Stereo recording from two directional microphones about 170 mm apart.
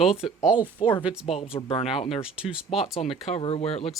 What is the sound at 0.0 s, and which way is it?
Speech, 35° left (ahead or behind).